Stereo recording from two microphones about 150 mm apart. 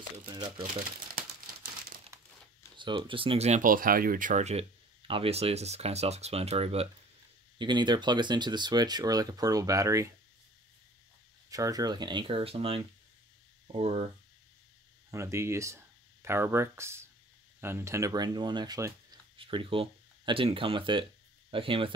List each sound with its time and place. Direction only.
0.3 s speech: 30° right (ahead or behind)
2.8 s speech: 35° right (ahead or behind)
3.6 s speech: 70° right (ahead or behind); by 4.6 s 50° right (ahead or behind)
5.0 s speech: 40° right (ahead or behind)
7.5 s speech: 30° right (ahead or behind)
11.5 s speech: 25° right (ahead or behind); by 14.0 s 45° right (ahead or behind)
15.0 s speech: 20° right (ahead or behind)
19.3 s speech: 35° right (ahead or behind)